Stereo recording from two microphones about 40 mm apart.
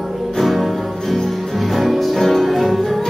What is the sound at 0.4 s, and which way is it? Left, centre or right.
Music, centre.